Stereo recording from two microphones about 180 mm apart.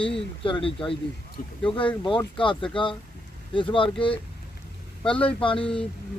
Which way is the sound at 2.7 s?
30° left (ahead or behind).